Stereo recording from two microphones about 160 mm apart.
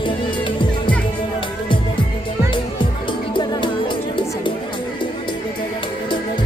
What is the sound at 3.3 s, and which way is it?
Music, 30° left (ahead or behind).